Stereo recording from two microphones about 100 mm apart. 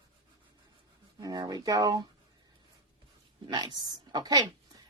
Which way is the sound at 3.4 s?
50° right (ahead or behind).